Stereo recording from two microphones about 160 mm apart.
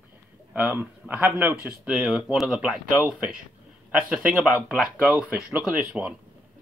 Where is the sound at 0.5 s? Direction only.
10° right (ahead or behind).